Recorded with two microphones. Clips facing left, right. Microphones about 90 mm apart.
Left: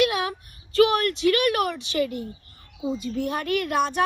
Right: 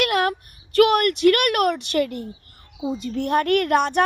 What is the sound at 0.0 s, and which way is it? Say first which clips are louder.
Speech: right 2 dB; 65° right (ahead or behind).